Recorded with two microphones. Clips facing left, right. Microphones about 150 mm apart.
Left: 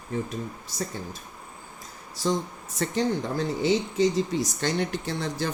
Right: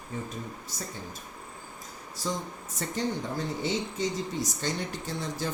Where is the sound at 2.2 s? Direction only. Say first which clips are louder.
Left 7 dB; 75° left (ahead or behind).